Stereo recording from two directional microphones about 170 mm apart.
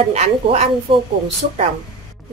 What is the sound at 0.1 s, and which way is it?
Speech, 40° right (ahead or behind).